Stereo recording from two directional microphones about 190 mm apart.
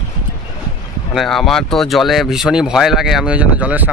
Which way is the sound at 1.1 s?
Centre (ahead or behind).